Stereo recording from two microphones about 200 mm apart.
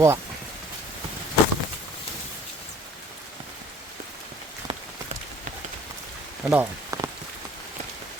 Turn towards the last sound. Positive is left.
turn(degrees=-15)  # may be behind; listen again after turning